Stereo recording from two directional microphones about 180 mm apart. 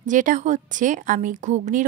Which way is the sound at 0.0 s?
45° right (ahead or behind).